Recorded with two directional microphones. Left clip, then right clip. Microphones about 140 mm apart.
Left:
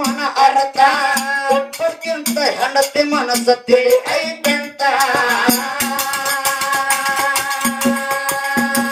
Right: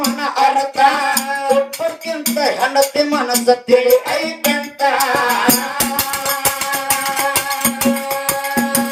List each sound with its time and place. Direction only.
0.3 s music: 35° left (ahead or behind)